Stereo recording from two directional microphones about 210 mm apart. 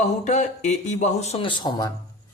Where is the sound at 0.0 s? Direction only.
35° left (ahead or behind).